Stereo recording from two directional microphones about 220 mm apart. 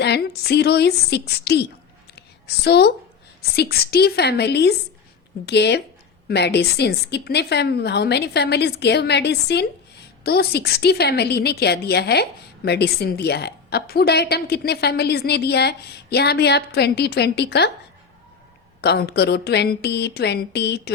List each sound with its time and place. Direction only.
0.0 s a woman's voice: 50° left (ahead or behind)
2.6 s a woman's voice: 50° left (ahead or behind)
18.8 s a woman's voice: 45° left (ahead or behind)